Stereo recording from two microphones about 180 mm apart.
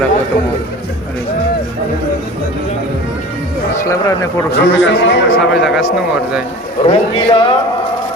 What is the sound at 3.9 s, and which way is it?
Speech, 15° left (ahead or behind).